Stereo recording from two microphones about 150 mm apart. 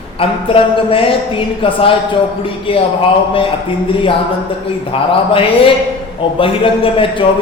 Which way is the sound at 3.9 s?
35° left (ahead or behind).